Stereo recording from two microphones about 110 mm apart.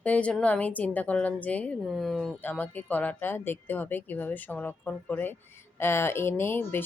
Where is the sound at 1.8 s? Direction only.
Centre (ahead or behind).